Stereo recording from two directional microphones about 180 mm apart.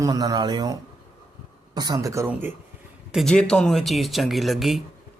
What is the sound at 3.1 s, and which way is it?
Speech, centre (ahead or behind).